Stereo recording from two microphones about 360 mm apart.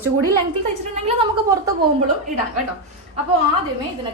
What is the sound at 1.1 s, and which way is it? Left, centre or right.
Speech, centre.